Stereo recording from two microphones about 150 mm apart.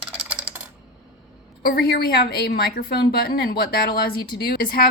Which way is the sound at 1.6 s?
90° left.